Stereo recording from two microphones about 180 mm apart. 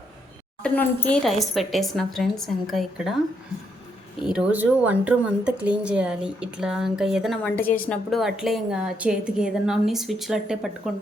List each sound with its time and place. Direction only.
0.6 s speech: 5° left (ahead or behind)
4.2 s speech: 5° right (ahead or behind)